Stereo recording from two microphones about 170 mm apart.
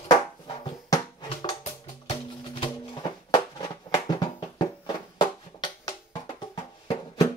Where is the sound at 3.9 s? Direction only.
25° left (ahead or behind).